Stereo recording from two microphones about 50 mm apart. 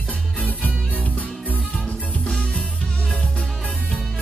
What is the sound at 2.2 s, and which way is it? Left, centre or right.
Music, centre.